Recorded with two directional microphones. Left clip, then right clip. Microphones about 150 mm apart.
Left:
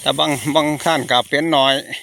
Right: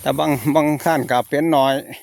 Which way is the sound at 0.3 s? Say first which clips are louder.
Right 1 dB; 30° right (ahead or behind).